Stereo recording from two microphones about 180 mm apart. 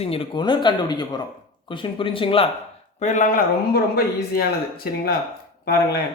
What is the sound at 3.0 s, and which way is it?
Speech, 40° left (ahead or behind).